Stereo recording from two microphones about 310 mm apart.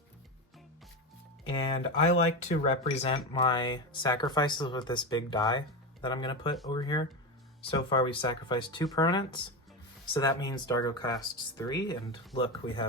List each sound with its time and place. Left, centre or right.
1.5 s speech: centre